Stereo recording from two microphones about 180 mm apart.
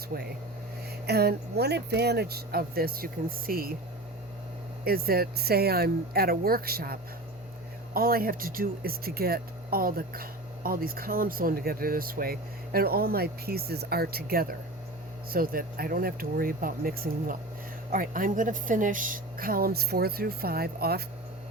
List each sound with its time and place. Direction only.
0.1 s speech: 55° right (ahead or behind)
4.9 s speech: 55° right (ahead or behind)